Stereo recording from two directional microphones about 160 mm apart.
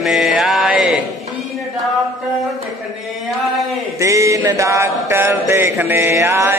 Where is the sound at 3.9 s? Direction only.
20° right (ahead or behind).